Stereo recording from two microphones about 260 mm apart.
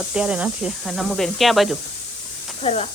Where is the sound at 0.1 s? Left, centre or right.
Centre.